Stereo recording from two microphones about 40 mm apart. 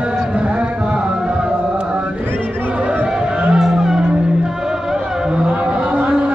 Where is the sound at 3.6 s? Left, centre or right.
Centre.